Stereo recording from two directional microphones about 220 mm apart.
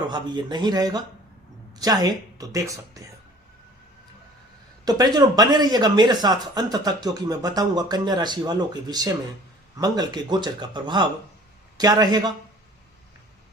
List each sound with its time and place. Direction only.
0.1 s speech: 20° right (ahead or behind)
4.9 s speech: 15° right (ahead or behind)